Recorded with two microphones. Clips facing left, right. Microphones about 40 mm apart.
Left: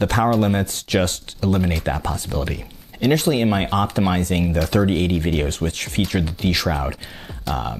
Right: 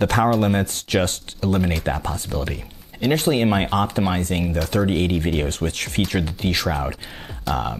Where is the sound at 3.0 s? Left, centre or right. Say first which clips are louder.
Left 1 dB; centre.